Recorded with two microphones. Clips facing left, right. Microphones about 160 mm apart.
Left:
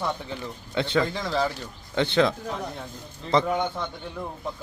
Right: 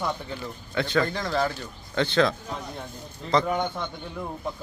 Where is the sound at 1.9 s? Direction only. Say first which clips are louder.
Left 1 dB; 20° left (ahead or behind).